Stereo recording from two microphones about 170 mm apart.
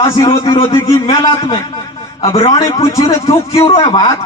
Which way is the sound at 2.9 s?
20° left (ahead or behind).